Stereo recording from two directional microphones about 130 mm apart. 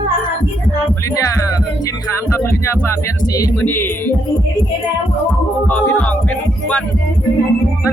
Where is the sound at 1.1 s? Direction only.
25° left (ahead or behind).